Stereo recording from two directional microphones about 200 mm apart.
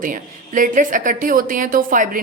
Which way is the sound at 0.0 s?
45° right (ahead or behind).